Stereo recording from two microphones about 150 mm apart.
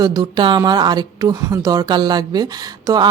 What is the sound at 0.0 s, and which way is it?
Speech, 25° right (ahead or behind).